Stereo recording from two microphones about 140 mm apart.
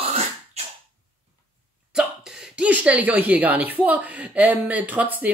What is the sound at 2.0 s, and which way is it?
Speech, 5° right (ahead or behind).